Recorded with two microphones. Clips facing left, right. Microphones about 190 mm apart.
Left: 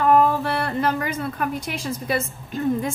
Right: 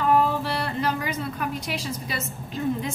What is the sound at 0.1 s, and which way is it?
A woman's voice, 50° left (ahead or behind).